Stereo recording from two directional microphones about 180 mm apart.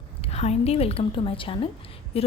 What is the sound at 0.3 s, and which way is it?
A woman's voice, 35° left (ahead or behind).